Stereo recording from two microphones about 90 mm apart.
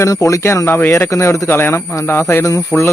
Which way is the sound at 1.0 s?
35° left (ahead or behind).